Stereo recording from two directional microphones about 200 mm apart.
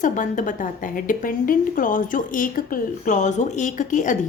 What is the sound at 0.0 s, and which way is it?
A woman's voice, 40° left (ahead or behind).